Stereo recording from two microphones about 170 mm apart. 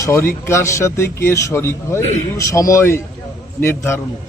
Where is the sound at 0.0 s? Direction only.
15° left (ahead or behind).